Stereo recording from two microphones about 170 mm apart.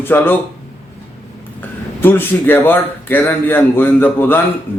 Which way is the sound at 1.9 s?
10° left (ahead or behind).